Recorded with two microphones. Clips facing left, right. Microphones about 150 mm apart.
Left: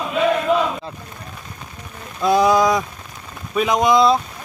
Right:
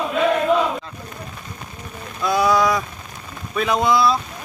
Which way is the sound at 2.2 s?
20° left (ahead or behind).